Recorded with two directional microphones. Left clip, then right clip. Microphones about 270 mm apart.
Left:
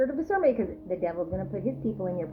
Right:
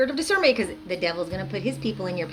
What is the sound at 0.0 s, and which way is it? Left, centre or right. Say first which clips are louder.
A woman's voice: right 4 dB; right.